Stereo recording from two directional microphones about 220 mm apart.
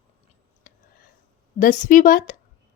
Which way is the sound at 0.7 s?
35° left (ahead or behind).